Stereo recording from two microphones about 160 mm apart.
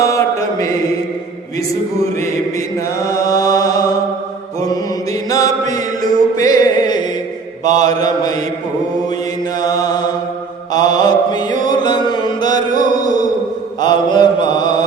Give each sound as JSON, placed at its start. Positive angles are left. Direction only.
{"t": 0.0, "sound": "mantra", "side_deg": 20}
{"t": 3.0, "sound": "mantra", "side_deg": 20}
{"t": 5.3, "sound": "mantra", "side_deg": 20}
{"t": 9.6, "sound": "mantra", "side_deg": 25}
{"t": 13.8, "sound": "mantra", "side_deg": 25}